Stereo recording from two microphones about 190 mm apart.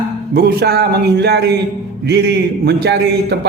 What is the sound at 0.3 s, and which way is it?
A man's voice, 60° right (ahead or behind).